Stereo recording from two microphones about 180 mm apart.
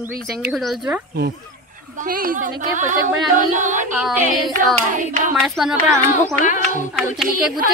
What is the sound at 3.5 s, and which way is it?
Speech, 45° right (ahead or behind).